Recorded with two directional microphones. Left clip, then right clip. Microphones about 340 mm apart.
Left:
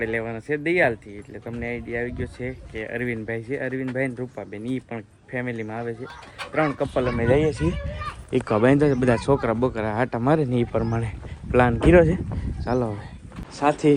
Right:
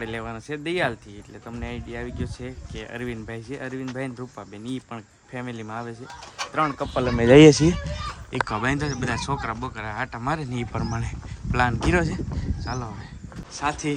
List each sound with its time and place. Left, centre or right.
0.0 s speech: centre
7.2 s speech: right
7.5 s speech: centre